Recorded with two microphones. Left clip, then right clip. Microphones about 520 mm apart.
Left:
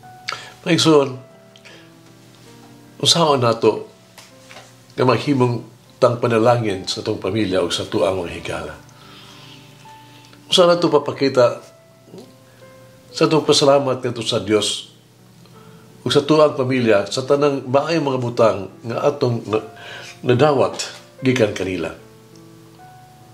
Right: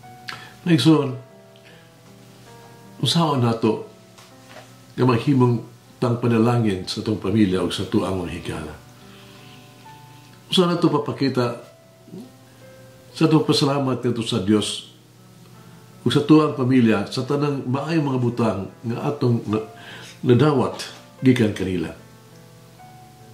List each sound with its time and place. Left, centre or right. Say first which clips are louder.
0.2 s tick-tock: left 6 dB; left
3.0 s a man's voice: left 6 dB; left
4.9 s a man's voice: left 3 dB; left
10.5 s a man's voice: left 6 dB; left
13.1 s speech: left 4 dB; left
16.1 s a man's voice: left 3 dB; left